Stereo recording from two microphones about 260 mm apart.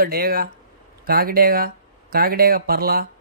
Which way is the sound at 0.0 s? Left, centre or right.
Right.